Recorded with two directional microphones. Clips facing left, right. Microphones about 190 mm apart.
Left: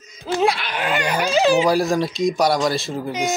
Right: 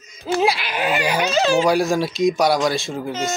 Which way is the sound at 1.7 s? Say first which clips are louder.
Even; centre (ahead or behind).